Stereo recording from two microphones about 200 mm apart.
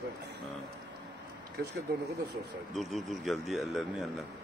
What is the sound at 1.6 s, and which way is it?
Speech, 50° right (ahead or behind).